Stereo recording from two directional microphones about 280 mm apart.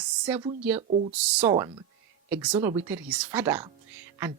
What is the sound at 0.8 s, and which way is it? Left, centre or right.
Speech, right.